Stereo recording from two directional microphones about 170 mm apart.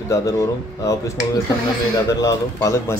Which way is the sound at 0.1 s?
20° left (ahead or behind).